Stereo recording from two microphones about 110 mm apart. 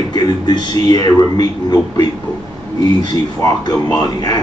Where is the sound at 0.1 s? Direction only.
40° left (ahead or behind).